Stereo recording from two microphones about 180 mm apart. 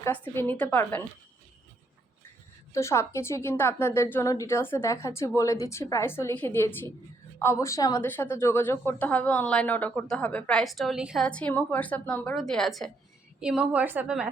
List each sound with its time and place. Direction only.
0.0 s speech: 10° left (ahead or behind)
2.7 s a woman's voice: 15° left (ahead or behind); by 14.3 s 5° right (ahead or behind)